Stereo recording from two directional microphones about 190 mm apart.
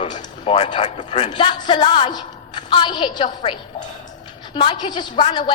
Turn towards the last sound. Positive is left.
turn(degrees=30)  # may be behind; listen again after turning